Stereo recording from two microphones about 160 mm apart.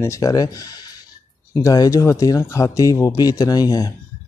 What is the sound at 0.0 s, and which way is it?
Speech, 20° left (ahead or behind).